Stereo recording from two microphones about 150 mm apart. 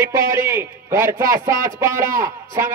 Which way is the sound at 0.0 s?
20° right (ahead or behind).